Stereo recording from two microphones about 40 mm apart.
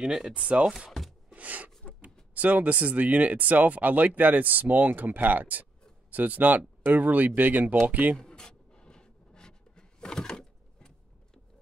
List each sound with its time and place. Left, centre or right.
0.0 s speech: centre
1.3 s a sound: right
2.3 s speech: right
8.2 s writing: centre